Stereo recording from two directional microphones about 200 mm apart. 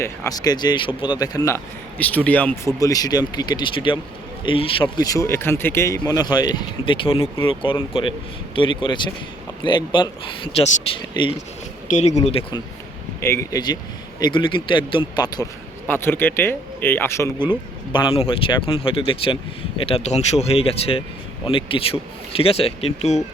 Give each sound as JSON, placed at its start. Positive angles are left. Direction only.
{"t": 0.0, "sound": "speech", "side_deg": 20}
{"t": 11.9, "sound": "speech", "side_deg": 35}
{"t": 13.1, "sound": "speech", "side_deg": 15}
{"t": 17.4, "sound": "speech", "side_deg": 25}